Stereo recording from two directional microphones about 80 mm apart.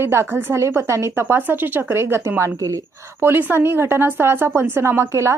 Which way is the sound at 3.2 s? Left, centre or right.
Right.